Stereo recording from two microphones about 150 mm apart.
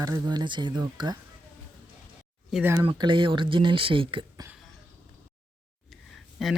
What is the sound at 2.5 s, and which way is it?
Speech, 15° right (ahead or behind).